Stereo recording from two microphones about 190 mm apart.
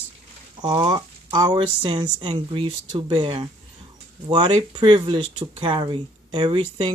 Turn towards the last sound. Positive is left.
turn(degrees=-25)  # may be behind; listen again after turning